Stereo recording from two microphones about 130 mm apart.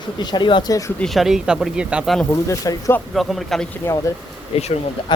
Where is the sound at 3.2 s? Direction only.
Centre (ahead or behind).